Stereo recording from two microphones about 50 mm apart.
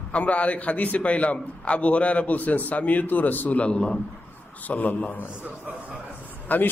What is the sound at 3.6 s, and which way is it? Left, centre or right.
A man's voice, left.